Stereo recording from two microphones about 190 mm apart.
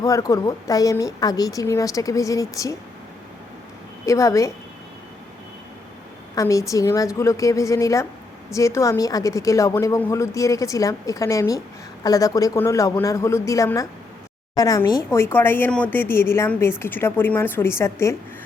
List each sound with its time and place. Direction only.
0.0 s speech: 15° left (ahead or behind)
4.0 s speech: 15° left (ahead or behind)
6.3 s speech: 15° left (ahead or behind)